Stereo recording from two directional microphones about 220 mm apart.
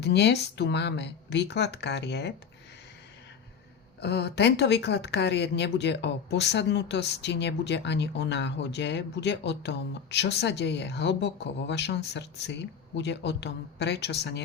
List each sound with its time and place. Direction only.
0.0 s speech: 50° left (ahead or behind)
4.0 s speech: 50° left (ahead or behind)